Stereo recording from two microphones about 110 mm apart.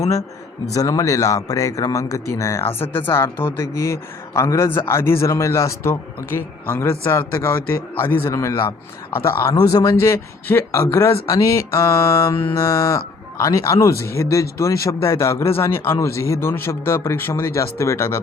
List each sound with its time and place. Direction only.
0.7 s a man's voice: 30° left (ahead or behind)
11.3 s a man's voice: 30° left (ahead or behind)